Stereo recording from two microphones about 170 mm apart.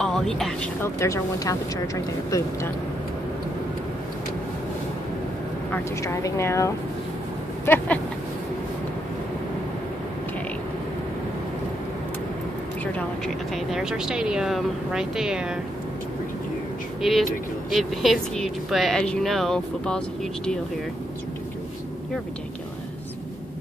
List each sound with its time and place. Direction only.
0.0 s speech: 5° left (ahead or behind)
0.9 s speech: 15° left (ahead or behind)
5.7 s speech: 15° left (ahead or behind)
12.9 s speech: centre (ahead or behind)
17.0 s speech: centre (ahead or behind)